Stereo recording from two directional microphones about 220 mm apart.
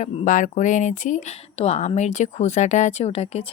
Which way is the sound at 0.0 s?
30° left (ahead or behind).